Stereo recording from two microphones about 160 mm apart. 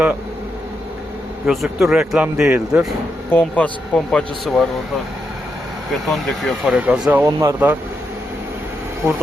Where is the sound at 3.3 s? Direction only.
10° left (ahead or behind).